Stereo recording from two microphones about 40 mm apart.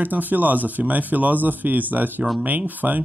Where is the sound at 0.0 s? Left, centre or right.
Right.